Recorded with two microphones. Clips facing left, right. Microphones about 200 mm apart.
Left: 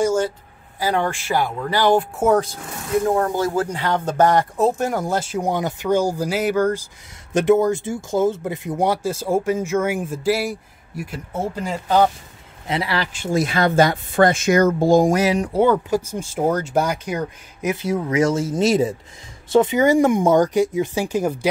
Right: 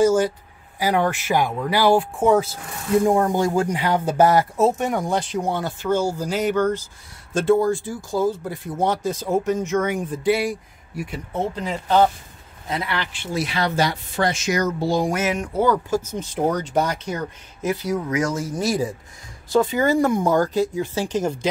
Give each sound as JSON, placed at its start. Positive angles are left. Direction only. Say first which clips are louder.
{"t": 0.7, "sound": "speech", "louder": "right 1 dB", "side_deg": -15}
{"t": 3.0, "sound": "speech", "louder": "right 1 dB", "side_deg": -20}
{"t": 12.6, "sound": "speech", "louder": "left 3 dB", "side_deg": 30}
{"t": 15.6, "sound": "speech", "louder": "left 2 dB", "side_deg": 25}
{"t": 16.0, "sound": "speech", "louder": "left 1 dB", "side_deg": 10}